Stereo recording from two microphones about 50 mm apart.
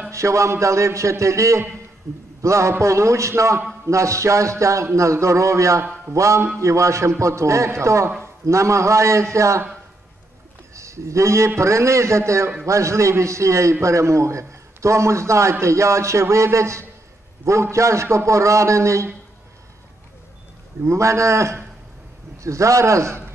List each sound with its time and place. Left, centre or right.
0.1 s a man's voice: right
3.8 s a man's voice: right
10.7 s a man's voice: right
20.8 s a man's voice: right
22.4 s a man's voice: right